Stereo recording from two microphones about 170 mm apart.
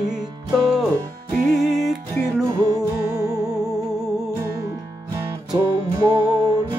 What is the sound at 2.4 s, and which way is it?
Music, 20° right (ahead or behind).